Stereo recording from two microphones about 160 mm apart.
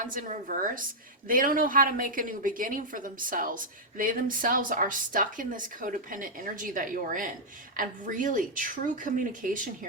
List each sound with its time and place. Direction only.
0.0 s a woman's voice: 55° right (ahead or behind)